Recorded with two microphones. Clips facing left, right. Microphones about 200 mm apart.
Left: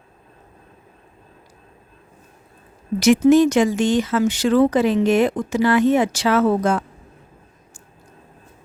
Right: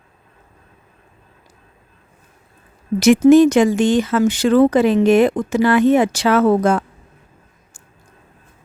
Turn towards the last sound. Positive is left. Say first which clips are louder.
# right 3 dB
turn(degrees=-55)  # may be behind; listen again after turning